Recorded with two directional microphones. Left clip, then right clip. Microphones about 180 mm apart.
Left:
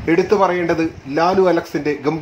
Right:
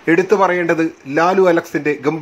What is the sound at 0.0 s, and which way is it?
A man's voice, 15° right (ahead or behind).